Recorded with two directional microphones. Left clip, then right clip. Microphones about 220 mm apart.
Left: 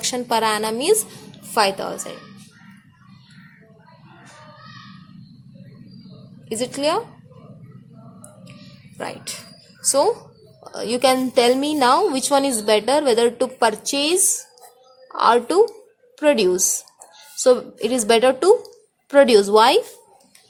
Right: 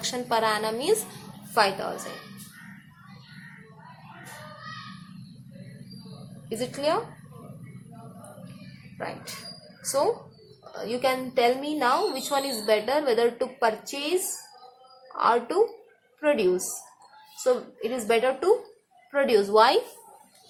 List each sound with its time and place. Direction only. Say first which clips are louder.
0.0 s a woman's voice: left 5 dB; 45° left (ahead or behind)
6.5 s a woman's voice: left 5 dB; 50° left (ahead or behind)
9.0 s a woman's voice: left 5 dB; 50° left (ahead or behind)
10.6 s a woman's voice: left 8 dB; 45° left (ahead or behind)
15.1 s a woman's voice: left 7 dB; 45° left (ahead or behind)